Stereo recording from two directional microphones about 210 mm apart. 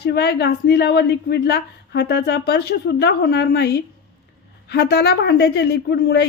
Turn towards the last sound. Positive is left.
turn(degrees=50)  # may be behind; listen again after turning